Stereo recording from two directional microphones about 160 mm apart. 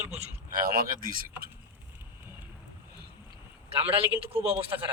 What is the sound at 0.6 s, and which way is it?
Speech, 65° right (ahead or behind).